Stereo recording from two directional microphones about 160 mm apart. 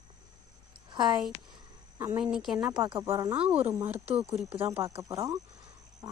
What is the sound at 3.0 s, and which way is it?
Speech, 20° right (ahead or behind).